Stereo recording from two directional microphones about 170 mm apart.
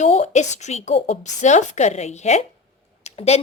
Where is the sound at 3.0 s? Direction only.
40° left (ahead or behind).